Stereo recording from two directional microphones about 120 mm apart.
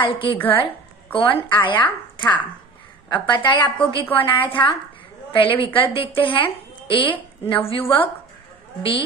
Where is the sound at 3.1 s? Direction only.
40° left (ahead or behind).